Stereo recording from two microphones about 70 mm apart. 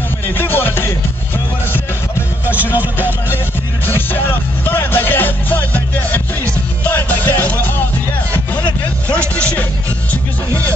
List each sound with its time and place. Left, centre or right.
0.4 s music: left
2.4 s music: right
3.8 s music: left
9.3 s music: centre